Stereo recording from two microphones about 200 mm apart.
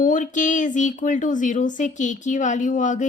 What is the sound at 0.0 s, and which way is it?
Speech, 40° left (ahead or behind).